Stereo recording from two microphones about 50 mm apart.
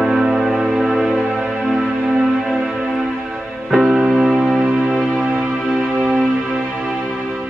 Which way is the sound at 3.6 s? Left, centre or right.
Centre.